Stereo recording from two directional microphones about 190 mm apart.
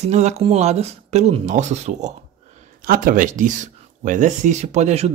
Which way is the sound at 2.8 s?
50° right (ahead or behind).